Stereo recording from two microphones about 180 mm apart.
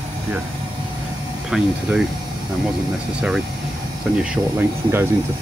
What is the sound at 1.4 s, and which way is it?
Speech, centre (ahead or behind).